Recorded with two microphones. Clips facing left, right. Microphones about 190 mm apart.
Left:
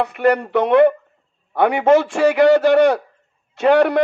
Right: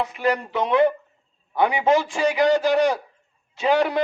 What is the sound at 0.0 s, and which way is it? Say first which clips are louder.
A man's voice: left 6 dB; 60° left (ahead or behind).